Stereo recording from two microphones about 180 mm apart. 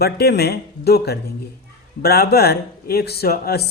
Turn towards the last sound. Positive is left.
turn(degrees=60)  # may be behind; listen again after turning